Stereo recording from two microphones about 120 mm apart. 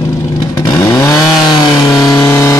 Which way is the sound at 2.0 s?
25° left (ahead or behind).